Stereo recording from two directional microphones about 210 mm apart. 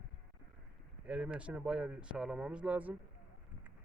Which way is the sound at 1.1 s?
5° right (ahead or behind).